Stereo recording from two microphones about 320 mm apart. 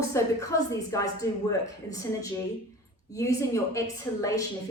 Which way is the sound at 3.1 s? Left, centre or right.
Centre.